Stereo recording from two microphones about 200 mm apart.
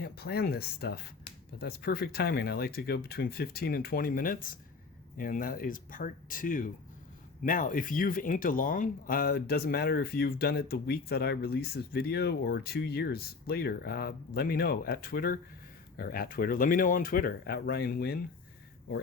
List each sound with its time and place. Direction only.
0.0 s speech: 50° left (ahead or behind)